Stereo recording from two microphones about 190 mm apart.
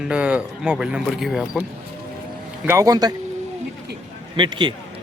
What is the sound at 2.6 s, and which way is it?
Speech, 15° right (ahead or behind).